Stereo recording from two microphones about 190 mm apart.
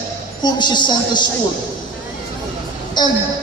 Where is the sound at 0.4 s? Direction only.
20° left (ahead or behind).